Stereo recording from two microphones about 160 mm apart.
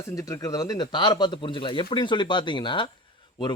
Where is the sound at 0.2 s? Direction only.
20° left (ahead or behind).